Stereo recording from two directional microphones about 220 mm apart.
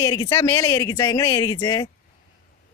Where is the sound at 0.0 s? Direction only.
15° left (ahead or behind).